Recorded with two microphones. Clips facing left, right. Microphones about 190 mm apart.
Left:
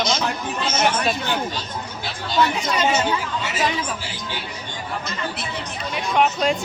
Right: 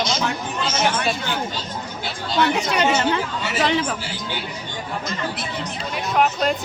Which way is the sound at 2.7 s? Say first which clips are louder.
Right 1 dB; 70° right (ahead or behind).